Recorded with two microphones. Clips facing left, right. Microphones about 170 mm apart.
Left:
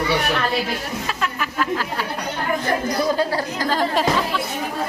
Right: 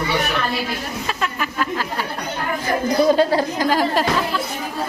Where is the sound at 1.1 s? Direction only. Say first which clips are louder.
Right 3 dB; centre (ahead or behind).